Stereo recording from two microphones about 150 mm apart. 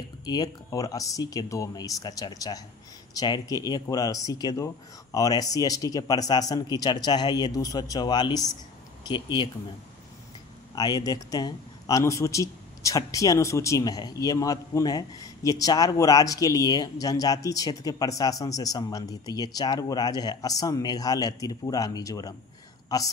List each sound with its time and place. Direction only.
0.2 s a man's voice: 25° left (ahead or behind)
10.7 s a man's voice: 25° left (ahead or behind)